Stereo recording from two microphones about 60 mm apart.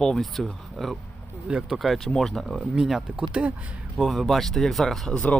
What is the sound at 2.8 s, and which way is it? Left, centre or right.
Speech, centre.